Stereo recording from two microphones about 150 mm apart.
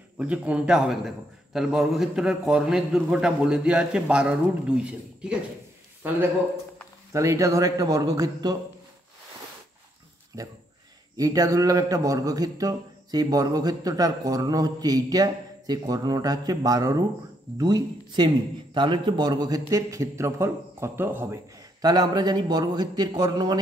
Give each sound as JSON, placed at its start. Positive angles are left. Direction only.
{"t": 0.2, "sound": "a man's voice", "side_deg": -10}
{"t": 10.3, "sound": "a man's voice", "side_deg": -20}
{"t": 21.8, "sound": "a man's voice", "side_deg": -25}